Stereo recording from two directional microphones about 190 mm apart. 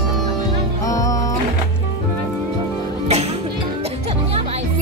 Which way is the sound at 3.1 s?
35° right (ahead or behind).